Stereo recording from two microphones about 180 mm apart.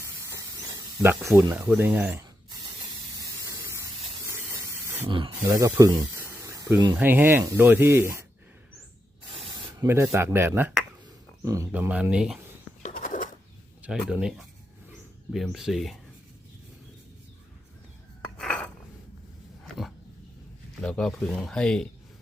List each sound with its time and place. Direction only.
0.2 s a sound: 15° right (ahead or behind)
1.2 s speech: 20° right (ahead or behind)
3.2 s spray: 15° right (ahead or behind)
4.3 s hiss: 15° right (ahead or behind)
5.0 s snake: 25° right (ahead or behind)
6.9 s speech: 10° right (ahead or behind)
9.7 s speech: 15° right (ahead or behind)
12.8 s a sound: 45° left (ahead or behind)
13.8 s speech: 5° right (ahead or behind)
18.3 s dishes: 5° left (ahead or behind)
19.6 s dog: centre (ahead or behind)
20.8 s speech: 5° left (ahead or behind)